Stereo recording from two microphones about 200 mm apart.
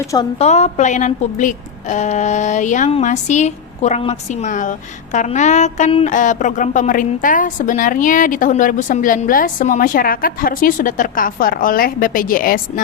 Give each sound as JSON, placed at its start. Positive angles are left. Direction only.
{"t": 0.3, "sound": "a woman's voice", "side_deg": 35}